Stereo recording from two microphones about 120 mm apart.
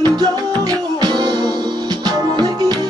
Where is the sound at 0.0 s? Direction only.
35° right (ahead or behind).